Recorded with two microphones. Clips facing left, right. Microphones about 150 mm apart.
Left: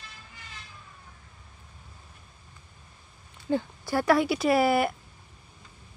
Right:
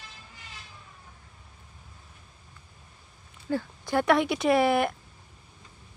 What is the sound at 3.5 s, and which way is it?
Speech, 20° left (ahead or behind).